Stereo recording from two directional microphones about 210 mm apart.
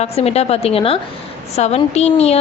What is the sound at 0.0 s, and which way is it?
A woman's voice, 30° left (ahead or behind).